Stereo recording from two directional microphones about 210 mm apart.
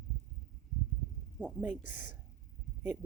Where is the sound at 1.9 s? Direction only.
40° left (ahead or behind).